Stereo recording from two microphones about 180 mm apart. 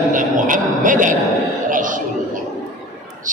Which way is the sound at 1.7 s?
45° right (ahead or behind).